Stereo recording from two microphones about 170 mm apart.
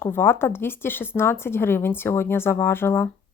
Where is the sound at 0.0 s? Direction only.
15° left (ahead or behind).